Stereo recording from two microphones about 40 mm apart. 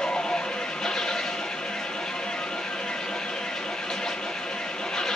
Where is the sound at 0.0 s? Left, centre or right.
Centre.